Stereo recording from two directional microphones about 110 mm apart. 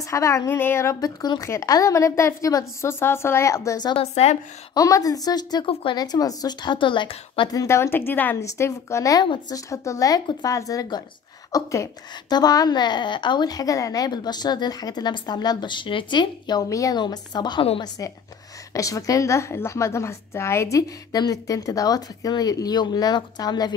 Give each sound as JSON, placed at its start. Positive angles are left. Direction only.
{"t": 0.0, "sound": "a woman's voice", "side_deg": 30}
{"t": 3.9, "sound": "a woman's voice", "side_deg": 70}
{"t": 4.7, "sound": "a woman's voice", "side_deg": 30}
{"t": 5.7, "sound": "speech", "side_deg": 60}
{"t": 5.9, "sound": "a woman's voice", "side_deg": 35}
{"t": 7.5, "sound": "a woman's voice", "side_deg": 25}
{"t": 9.2, "sound": "a woman's voice", "side_deg": 45}
{"t": 9.7, "sound": "a woman's voice", "side_deg": 30}
{"t": 12.3, "sound": "a woman's voice", "side_deg": 40}
{"t": 17.0, "sound": "a woman's voice", "side_deg": 40}
{"t": 18.7, "sound": "a woman's voice", "side_deg": 30}